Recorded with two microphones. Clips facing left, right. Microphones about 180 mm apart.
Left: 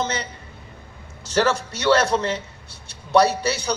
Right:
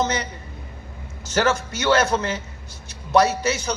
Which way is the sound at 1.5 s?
35° left (ahead or behind).